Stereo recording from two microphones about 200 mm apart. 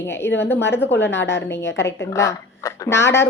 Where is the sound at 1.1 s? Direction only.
65° left (ahead or behind).